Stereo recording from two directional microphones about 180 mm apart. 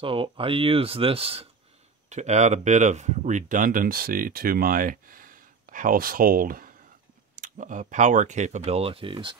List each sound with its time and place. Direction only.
0.0 s speech: 30° right (ahead or behind)